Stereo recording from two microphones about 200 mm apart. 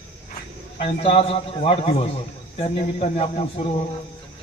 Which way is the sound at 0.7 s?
30° left (ahead or behind).